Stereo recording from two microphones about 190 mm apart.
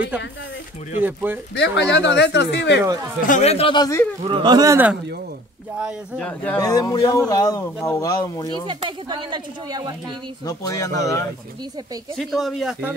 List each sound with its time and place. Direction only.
1.0 s speech: 10° right (ahead or behind)
1.5 s speech: 65° left (ahead or behind)
2.8 s speech: 15° right (ahead or behind)
3.3 s speech: 35° left (ahead or behind)
4.2 s speech: 25° right (ahead or behind); by 6.2 s 5° right (ahead or behind)
6.2 s speech: 10° left (ahead or behind)
6.6 s speech: 20° left (ahead or behind)
8.6 s speech: 25° right (ahead or behind)
10.4 s speech: 15° left (ahead or behind)
12.2 s speech: centre (ahead or behind)